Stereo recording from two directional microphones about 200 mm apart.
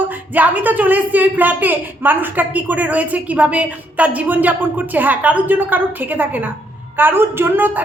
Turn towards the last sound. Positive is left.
turn(degrees=-10)  # may be behind; listen again after turning